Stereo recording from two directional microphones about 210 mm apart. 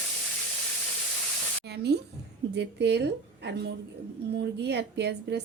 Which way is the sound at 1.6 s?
50° right (ahead or behind).